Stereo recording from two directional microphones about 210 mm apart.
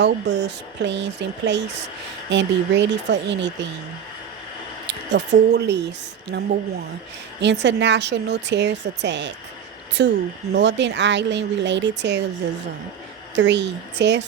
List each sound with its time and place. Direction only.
0.0 s speech: 55° right (ahead or behind)
4.9 s speech: 55° right (ahead or behind)
7.4 s speech: 55° right (ahead or behind)
13.3 s speech: 55° right (ahead or behind)